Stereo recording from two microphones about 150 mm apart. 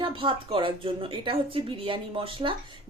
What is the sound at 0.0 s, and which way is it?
A woman's voice, 35° right (ahead or behind).